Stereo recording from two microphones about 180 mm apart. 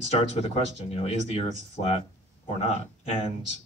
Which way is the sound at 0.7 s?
35° left (ahead or behind).